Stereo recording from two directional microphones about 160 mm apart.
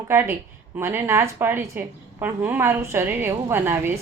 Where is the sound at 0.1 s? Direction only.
15° right (ahead or behind).